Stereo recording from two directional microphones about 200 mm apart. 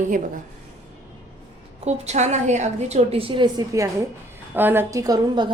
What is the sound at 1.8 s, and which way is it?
A woman's voice, 35° right (ahead or behind).